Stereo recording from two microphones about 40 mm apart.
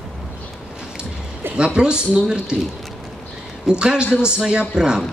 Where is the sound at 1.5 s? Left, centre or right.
Right.